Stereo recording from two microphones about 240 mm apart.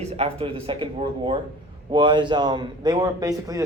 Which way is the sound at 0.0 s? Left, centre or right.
Right.